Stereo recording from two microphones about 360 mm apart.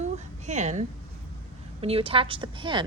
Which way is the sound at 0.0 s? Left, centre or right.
Centre.